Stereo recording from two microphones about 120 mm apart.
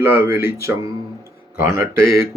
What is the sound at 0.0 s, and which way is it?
Speech, 20° right (ahead or behind).